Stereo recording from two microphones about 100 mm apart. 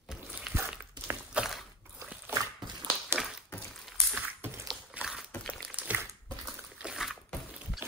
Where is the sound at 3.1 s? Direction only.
25° right (ahead or behind).